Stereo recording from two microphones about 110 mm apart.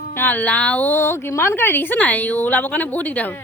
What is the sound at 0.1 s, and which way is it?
A woman's voice, 20° left (ahead or behind).